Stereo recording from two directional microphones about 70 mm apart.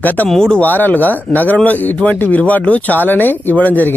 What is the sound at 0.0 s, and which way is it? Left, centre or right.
Speech, left.